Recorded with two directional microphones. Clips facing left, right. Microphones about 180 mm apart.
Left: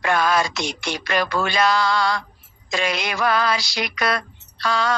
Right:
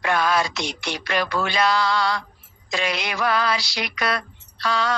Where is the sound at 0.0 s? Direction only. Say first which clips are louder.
Left 1 dB; 45° left (ahead or behind).